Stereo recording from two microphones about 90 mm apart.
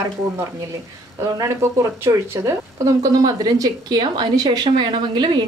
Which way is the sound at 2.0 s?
30° right (ahead or behind).